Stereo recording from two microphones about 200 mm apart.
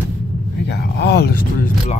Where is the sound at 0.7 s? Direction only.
60° left (ahead or behind).